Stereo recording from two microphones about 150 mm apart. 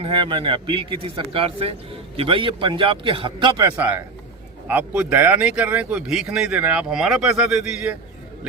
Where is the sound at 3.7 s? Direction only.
10° right (ahead or behind).